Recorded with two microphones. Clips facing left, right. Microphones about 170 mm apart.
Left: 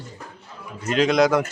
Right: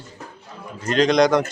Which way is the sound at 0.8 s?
5° left (ahead or behind).